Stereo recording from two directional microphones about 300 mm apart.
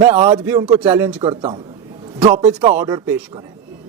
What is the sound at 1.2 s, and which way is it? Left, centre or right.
Speech, centre.